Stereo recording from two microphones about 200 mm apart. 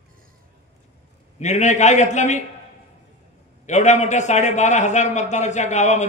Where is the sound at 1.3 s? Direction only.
35° left (ahead or behind).